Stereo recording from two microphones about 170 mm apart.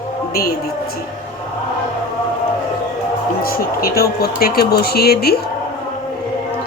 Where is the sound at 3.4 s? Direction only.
60° left (ahead or behind).